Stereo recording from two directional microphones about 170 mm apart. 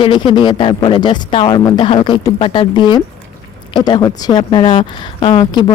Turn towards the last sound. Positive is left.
turn(degrees=25)  # may be behind; listen again after turning